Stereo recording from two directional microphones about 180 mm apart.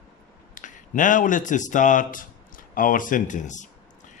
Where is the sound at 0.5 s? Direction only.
45° left (ahead or behind).